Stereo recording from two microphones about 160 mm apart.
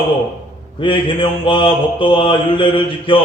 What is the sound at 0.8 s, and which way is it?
A man's voice, 30° left (ahead or behind).